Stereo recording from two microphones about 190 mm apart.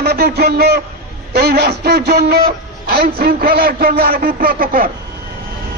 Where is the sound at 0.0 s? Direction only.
55° right (ahead or behind).